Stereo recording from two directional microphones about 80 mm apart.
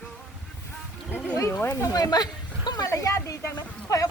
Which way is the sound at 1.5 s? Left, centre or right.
Left.